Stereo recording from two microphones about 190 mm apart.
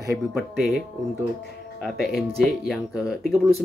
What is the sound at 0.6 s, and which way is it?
Speech, centre (ahead or behind).